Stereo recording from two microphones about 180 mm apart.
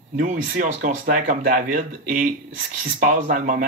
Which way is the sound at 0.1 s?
45° right (ahead or behind).